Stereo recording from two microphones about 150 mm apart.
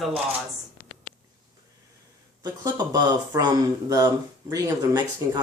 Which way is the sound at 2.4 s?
25° right (ahead or behind).